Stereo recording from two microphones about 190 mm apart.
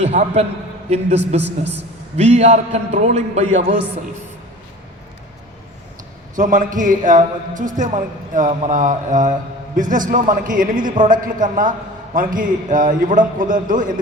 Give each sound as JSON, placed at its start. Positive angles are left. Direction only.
{"t": 0.0, "sound": "a man's voice", "side_deg": -35}
{"t": 1.4, "sound": "a woman's voice", "side_deg": -65}
{"t": 1.7, "sound": "a man's voice", "side_deg": -35}
{"t": 6.3, "sound": "a man's voice", "side_deg": -45}